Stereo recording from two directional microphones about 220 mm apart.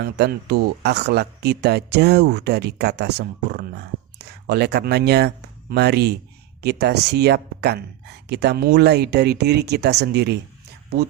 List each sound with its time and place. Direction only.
0.0 s speech: 50° right (ahead or behind)